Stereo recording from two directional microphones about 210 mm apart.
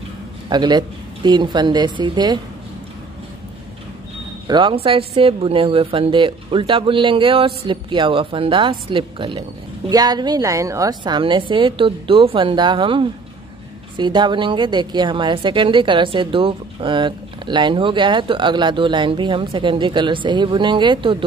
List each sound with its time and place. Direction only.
0.5 s a woman's voice: 20° right (ahead or behind)
4.5 s a woman's voice: 20° right (ahead or behind)